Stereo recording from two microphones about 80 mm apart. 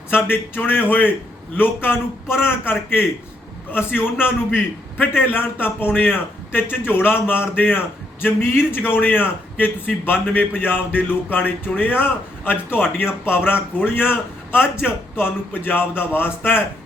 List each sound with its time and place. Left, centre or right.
0.1 s a man's voice: left